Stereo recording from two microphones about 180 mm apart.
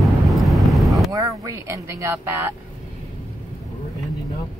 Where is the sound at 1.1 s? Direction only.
20° right (ahead or behind).